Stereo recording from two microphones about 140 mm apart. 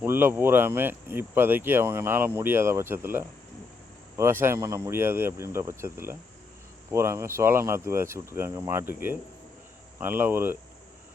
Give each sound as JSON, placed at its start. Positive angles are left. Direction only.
{"t": 0.0, "sound": "speech", "side_deg": -15}